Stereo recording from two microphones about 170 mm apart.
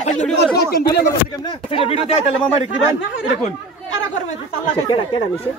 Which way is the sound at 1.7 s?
35° left (ahead or behind).